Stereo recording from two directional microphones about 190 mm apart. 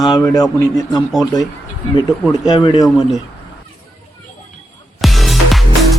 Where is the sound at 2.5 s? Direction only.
25° left (ahead or behind).